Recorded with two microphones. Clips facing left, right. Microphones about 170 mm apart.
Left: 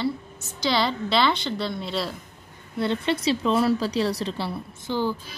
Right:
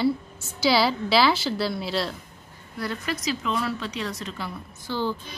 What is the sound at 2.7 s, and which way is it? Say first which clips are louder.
Speech: left 6 dB; 25° left (ahead or behind).